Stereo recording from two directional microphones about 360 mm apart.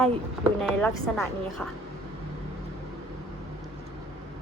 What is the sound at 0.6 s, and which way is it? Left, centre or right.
A woman's voice, centre.